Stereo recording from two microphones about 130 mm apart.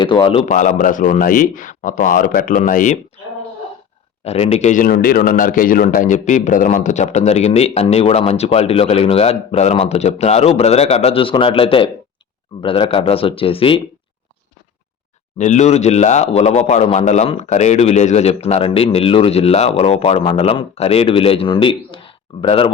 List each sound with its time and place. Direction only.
0.0 s a man's voice: 40° left (ahead or behind)
0.4 s a man's voice: 75° left (ahead or behind)
4.2 s a man's voice: 50° left (ahead or behind)
15.4 s a man's voice: 65° left (ahead or behind); by 22.7 s 45° left (ahead or behind)